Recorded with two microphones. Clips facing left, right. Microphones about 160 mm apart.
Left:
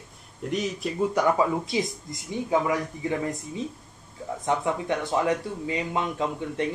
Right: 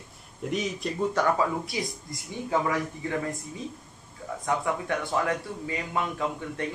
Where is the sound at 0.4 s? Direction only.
Centre (ahead or behind).